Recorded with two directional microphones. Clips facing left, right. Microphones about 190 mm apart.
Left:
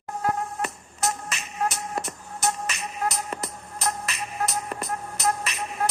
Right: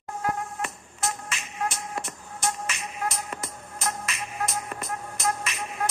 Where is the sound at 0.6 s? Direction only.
40° left (ahead or behind).